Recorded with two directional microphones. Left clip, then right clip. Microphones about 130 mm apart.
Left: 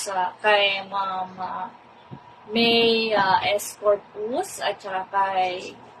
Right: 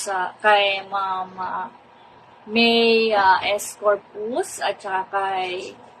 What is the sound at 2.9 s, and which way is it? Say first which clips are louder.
A woman's voice: right 4 dB; 20° right (ahead or behind).